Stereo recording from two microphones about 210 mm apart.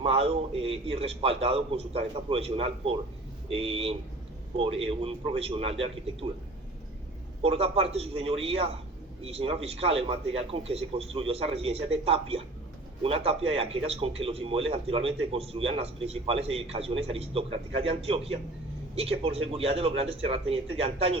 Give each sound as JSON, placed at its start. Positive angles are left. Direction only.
{"t": 0.0, "sound": "a man's voice", "side_deg": -30}
{"t": 7.4, "sound": "a man's voice", "side_deg": -30}